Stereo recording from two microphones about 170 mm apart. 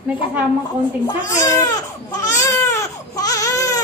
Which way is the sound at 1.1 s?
20° left (ahead or behind).